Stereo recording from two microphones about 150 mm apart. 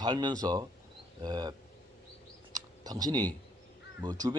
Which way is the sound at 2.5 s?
25° right (ahead or behind).